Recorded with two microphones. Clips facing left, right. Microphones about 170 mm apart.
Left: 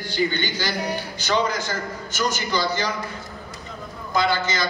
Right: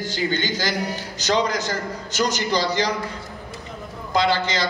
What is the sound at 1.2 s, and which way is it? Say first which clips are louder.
A man's voice: right 2 dB; 40° right (ahead or behind).